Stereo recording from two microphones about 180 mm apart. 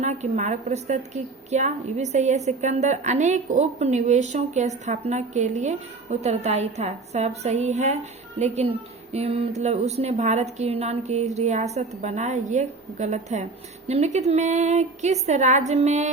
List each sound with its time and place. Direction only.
0.0 s a woman's voice: 40° right (ahead or behind)